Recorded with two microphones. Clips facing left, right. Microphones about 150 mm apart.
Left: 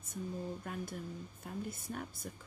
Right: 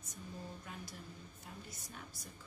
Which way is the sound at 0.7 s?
50° left (ahead or behind).